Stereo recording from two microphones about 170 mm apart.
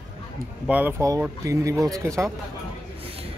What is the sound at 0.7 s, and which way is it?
Speech, 10° right (ahead or behind).